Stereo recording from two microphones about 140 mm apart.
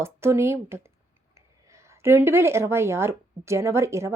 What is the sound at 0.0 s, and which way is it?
A woman's voice, 20° right (ahead or behind).